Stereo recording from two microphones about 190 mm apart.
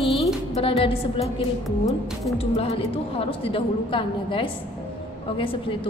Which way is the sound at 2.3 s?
30° left (ahead or behind).